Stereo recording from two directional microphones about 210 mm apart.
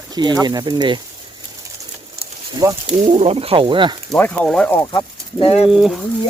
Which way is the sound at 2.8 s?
25° right (ahead or behind).